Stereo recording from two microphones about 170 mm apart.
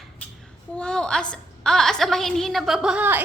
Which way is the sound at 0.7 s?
5° left (ahead or behind).